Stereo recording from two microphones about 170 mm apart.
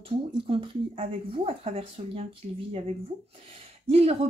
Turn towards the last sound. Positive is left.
turn(degrees=-35)  # may be behind; listen again after turning